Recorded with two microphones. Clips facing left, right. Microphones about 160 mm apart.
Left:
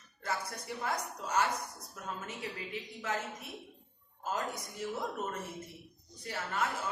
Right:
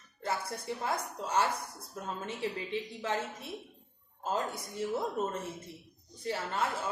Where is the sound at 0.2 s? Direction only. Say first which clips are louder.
Right 3 dB; 25° right (ahead or behind).